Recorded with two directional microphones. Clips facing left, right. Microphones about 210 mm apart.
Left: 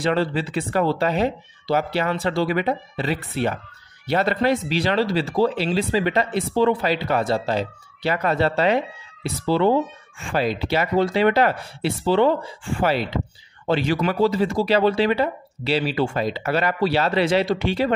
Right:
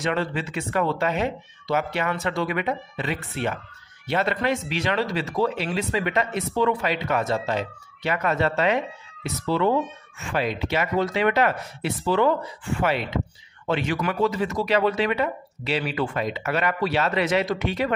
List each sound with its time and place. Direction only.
0.0 s speech: 35° left (ahead or behind)